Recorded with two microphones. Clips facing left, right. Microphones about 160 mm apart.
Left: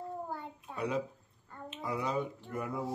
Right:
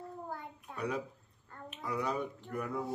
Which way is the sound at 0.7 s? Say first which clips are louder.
Left 3 dB; 25° left (ahead or behind).